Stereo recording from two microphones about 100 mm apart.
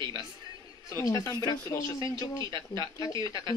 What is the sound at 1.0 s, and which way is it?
Speech, 35° left (ahead or behind).